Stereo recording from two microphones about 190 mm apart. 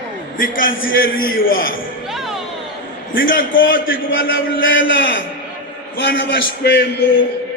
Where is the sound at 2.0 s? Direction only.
Centre (ahead or behind).